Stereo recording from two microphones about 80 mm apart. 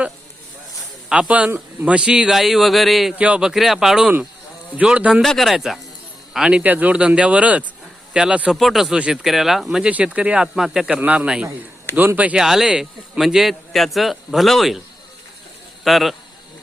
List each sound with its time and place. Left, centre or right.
1.1 s a man's voice: centre
3.2 s speech: centre
3.5 s a man's voice: centre
4.7 s speech: centre
5.2 s a man's voice: centre
6.6 s speech: centre
8.5 s a man's voice: centre
9.9 s speech: centre
12.4 s a man's voice: centre
15.8 s speech: centre